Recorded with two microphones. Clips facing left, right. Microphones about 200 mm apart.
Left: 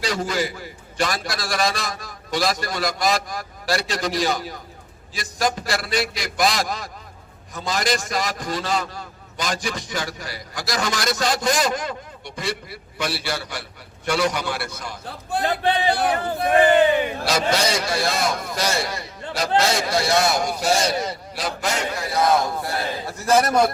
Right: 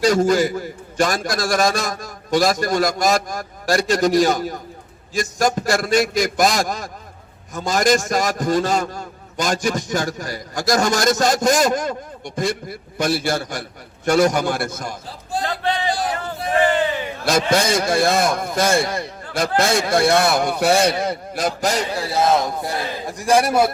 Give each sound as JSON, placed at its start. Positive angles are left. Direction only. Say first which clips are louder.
{"t": 0.0, "sound": "a man's voice", "louder": "right 8 dB", "side_deg": -45}
{"t": 15.0, "sound": "a man's voice", "louder": "left 2 dB", "side_deg": 60}
{"t": 15.7, "sound": "a sound", "louder": "left 1 dB", "side_deg": 60}
{"t": 16.4, "sound": "crowd", "louder": "left 2 dB", "side_deg": 60}
{"t": 17.2, "sound": "a man's voice", "louder": "right 7 dB", "side_deg": -50}